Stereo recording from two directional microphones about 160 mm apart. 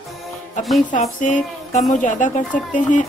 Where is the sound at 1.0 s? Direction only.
50° left (ahead or behind).